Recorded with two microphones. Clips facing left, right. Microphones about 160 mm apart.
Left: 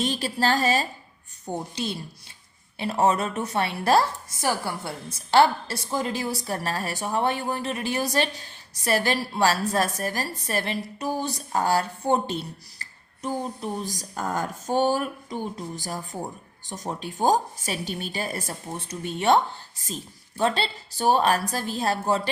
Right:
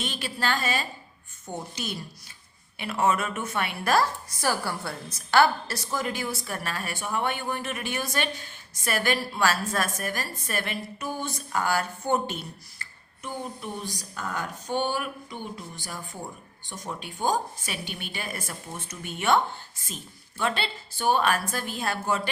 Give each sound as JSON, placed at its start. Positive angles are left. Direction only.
{"t": 0.0, "sound": "a woman's voice", "side_deg": 35}